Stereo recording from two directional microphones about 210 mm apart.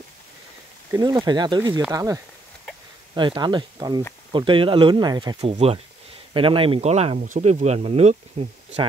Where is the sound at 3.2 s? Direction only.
20° right (ahead or behind).